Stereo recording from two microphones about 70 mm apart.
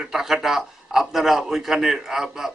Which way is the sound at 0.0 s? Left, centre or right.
Centre.